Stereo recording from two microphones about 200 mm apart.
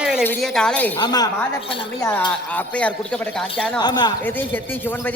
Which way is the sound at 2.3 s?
5° left (ahead or behind).